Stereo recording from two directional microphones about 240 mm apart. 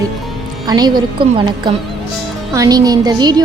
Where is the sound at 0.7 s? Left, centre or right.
Centre.